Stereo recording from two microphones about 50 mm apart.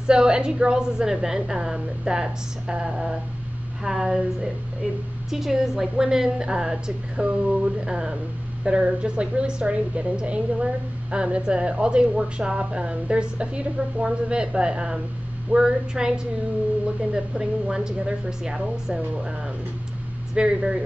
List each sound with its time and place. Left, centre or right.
0.0 s a woman's voice: centre
5.3 s a woman's voice: centre
20.3 s a woman's voice: centre